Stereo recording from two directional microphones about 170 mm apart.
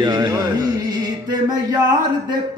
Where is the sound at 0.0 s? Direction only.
25° right (ahead or behind).